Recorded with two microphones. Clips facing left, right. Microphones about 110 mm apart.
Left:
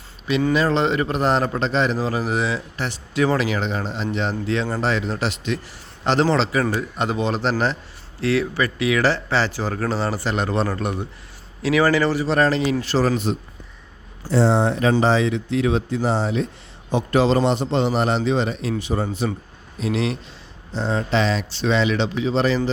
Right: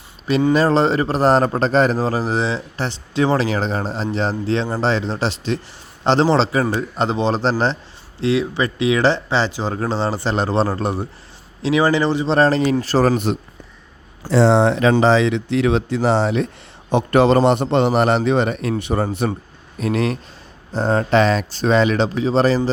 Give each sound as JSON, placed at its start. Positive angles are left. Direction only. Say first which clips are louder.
{"t": 0.5, "sound": "a man's voice", "louder": "right 4 dB", "side_deg": -35}
{"t": 8.2, "sound": "speech", "louder": "right 2 dB", "side_deg": -20}
{"t": 11.6, "sound": "a man's voice", "louder": "right 1 dB", "side_deg": -25}
{"t": 13.1, "sound": "a man's voice", "louder": "right 3 dB", "side_deg": -65}
{"t": 14.3, "sound": "speech", "louder": "right 4 dB", "side_deg": -90}
{"t": 16.9, "sound": "a man's voice", "louder": "right 4 dB", "side_deg": -60}
{"t": 19.8, "sound": "speech", "louder": "right 3 dB", "side_deg": -50}